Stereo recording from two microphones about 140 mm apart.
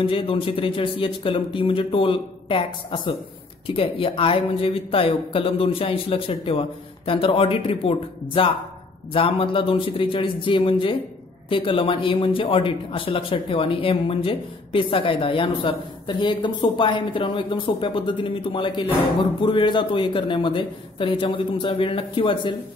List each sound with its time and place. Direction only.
0.0 s speech: 40° left (ahead or behind)